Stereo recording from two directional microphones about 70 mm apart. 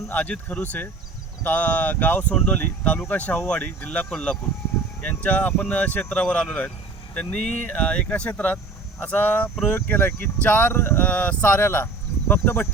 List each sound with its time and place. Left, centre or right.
0.1 s speech: left